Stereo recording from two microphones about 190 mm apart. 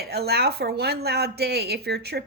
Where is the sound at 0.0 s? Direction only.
55° right (ahead or behind).